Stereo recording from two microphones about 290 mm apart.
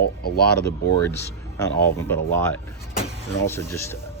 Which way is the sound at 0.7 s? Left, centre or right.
Centre.